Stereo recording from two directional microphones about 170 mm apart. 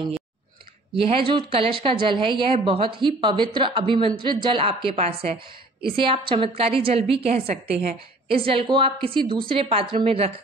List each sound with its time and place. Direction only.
0.9 s a woman's voice: 30° right (ahead or behind)